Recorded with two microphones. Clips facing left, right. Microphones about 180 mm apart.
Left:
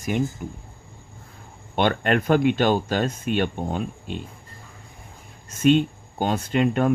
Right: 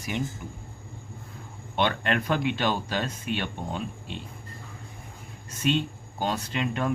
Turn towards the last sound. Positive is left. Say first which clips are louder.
# left 8 dB
turn(degrees=50)  # may be behind; listen again after turning